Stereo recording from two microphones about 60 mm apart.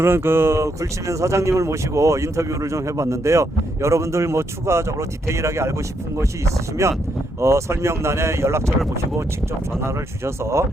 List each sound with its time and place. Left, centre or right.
0.0 s speech: right
9.8 s speech: right